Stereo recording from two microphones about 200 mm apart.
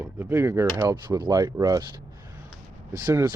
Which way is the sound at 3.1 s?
20° right (ahead or behind).